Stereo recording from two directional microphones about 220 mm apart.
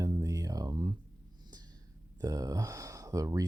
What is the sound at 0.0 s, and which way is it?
Music, 15° right (ahead or behind).